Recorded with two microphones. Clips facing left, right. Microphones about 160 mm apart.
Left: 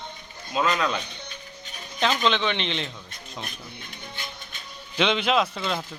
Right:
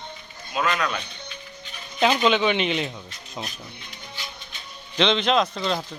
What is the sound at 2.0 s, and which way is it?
Speech, 10° right (ahead or behind).